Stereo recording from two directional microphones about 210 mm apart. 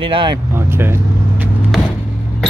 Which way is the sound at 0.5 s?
10° right (ahead or behind).